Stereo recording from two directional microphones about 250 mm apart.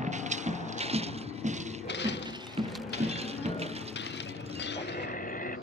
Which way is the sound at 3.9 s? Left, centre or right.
Left.